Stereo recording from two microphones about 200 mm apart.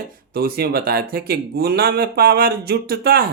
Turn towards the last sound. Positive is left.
turn(degrees=-50)  # may be behind; listen again after turning